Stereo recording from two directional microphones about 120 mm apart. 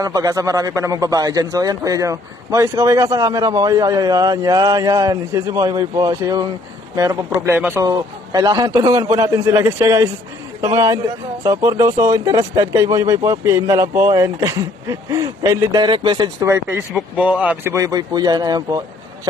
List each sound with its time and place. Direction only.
0.0 s a man's voice: 30° right (ahead or behind)
7.5 s a man's voice: 15° right (ahead or behind)
7.8 s a man's voice: 30° right (ahead or behind)
16.4 s a man's voice: 25° right (ahead or behind)
17.2 s speech: 10° right (ahead or behind); by 19.3 s 35° right (ahead or behind)